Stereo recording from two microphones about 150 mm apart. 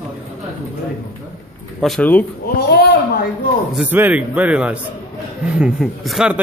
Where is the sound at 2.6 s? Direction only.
80° left.